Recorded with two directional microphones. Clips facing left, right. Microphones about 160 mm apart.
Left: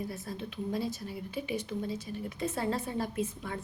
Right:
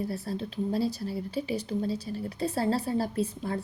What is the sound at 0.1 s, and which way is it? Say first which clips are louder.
A woman's voice: right 6 dB; 35° right (ahead or behind).